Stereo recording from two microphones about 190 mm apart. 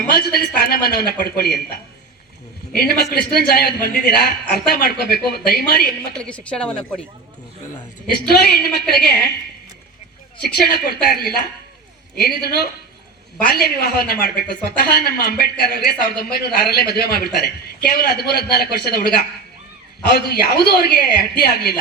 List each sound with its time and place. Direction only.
0.1 s speech: 55° left (ahead or behind)
6.2 s a woman's voice: 5° left (ahead or behind)
8.3 s speech: 55° left (ahead or behind)
10.5 s speech: 55° left (ahead or behind)
13.5 s speech: 55° left (ahead or behind)